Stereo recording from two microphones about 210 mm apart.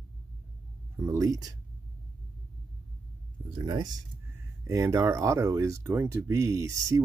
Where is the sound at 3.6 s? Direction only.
20° right (ahead or behind).